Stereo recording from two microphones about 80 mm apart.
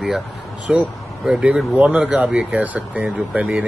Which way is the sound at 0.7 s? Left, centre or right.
Centre.